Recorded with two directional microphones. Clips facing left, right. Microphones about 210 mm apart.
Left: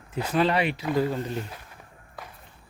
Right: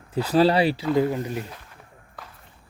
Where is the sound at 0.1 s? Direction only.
35° right (ahead or behind).